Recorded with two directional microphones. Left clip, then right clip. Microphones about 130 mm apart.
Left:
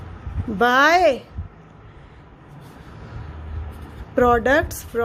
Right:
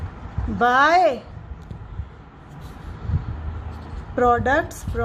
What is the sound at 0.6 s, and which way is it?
Speech, 65° left (ahead or behind).